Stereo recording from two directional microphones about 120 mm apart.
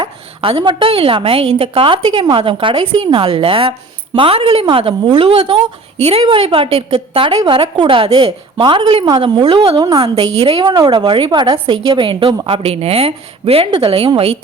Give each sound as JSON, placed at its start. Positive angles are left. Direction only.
{"t": 0.5, "sound": "a woman's voice", "side_deg": -40}